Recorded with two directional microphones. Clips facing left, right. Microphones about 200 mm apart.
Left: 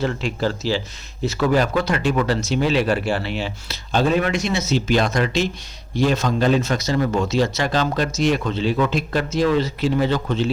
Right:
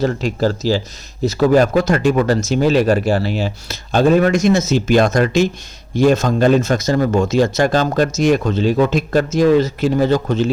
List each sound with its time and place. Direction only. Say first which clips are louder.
0.0 s speech: right 5 dB; 40° right (ahead or behind)